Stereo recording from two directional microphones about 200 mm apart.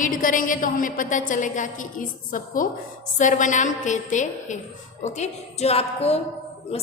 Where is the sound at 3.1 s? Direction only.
40° left (ahead or behind).